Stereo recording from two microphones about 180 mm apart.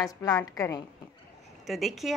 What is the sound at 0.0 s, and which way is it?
Speech, 15° left (ahead or behind).